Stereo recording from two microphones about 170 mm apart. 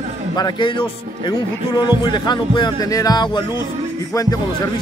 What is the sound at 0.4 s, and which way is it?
Music, 30° left (ahead or behind).